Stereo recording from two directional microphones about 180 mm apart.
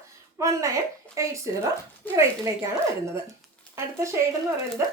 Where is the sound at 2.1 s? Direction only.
10° left (ahead or behind).